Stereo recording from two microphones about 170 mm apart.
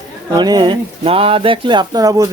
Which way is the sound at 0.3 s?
25° right (ahead or behind).